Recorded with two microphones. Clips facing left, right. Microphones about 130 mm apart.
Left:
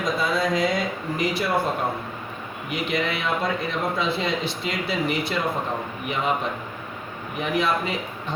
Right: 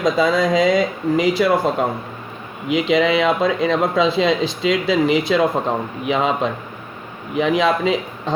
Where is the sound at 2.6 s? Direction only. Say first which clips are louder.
Right 10 dB; 90° right.